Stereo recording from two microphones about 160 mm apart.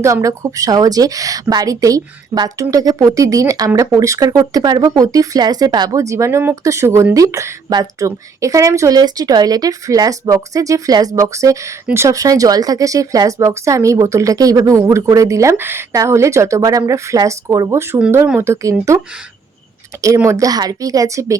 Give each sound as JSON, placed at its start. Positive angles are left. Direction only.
{"t": 0.0, "sound": "a woman's voice", "side_deg": -20}
{"t": 20.1, "sound": "a woman's voice", "side_deg": -20}